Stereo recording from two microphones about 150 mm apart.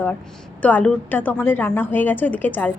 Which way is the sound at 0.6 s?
10° left (ahead or behind).